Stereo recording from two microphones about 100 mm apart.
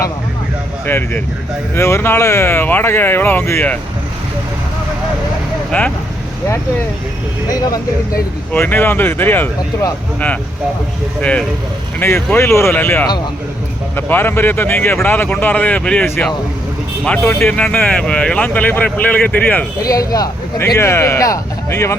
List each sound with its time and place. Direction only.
0.9 s speech: 20° left (ahead or behind)
5.7 s speech: 15° left (ahead or behind)
8.5 s speech: 20° left (ahead or behind)
11.2 s speech: 10° left (ahead or behind)
17.2 s speech: 15° left (ahead or behind)
19.8 s speech: 35° left (ahead or behind)
20.6 s speech: 25° left (ahead or behind)